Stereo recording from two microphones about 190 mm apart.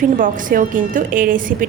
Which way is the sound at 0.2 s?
45° right (ahead or behind).